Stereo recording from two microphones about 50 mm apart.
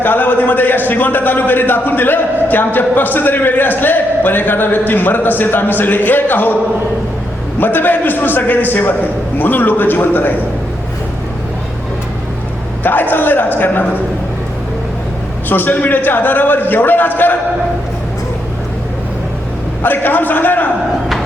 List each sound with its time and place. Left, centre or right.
0.0 s speech: left
7.6 s speech: left
12.8 s speech: left
15.4 s speech: left
19.8 s speech: left